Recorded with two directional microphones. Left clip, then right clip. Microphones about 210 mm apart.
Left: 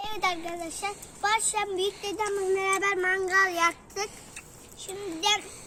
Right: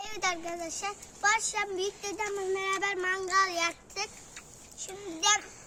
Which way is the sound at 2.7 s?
50° right (ahead or behind).